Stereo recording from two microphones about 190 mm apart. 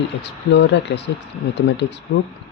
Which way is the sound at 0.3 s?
65° left (ahead or behind).